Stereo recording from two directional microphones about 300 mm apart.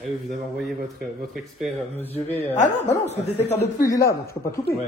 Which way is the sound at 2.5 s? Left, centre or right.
Left.